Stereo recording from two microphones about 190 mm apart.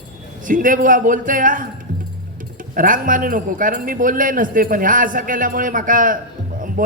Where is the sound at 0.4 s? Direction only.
45° right (ahead or behind).